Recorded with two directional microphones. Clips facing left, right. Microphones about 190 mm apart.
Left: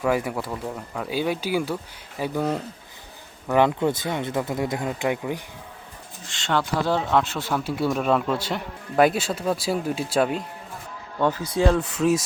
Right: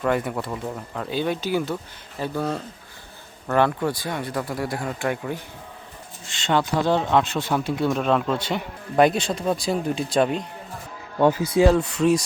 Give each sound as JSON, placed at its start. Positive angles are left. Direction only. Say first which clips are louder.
{"t": 0.0, "sound": "speech", "louder": "even", "side_deg": 5}
{"t": 6.8, "sound": "speech", "louder": "right 2 dB", "side_deg": 5}
{"t": 11.2, "sound": "speech", "louder": "right 4 dB", "side_deg": -10}